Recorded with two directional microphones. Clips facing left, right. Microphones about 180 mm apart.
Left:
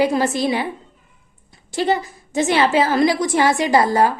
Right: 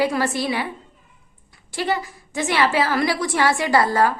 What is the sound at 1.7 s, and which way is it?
A woman's voice, 25° left (ahead or behind).